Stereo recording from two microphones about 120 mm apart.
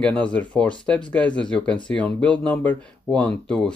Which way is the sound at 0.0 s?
10° left (ahead or behind).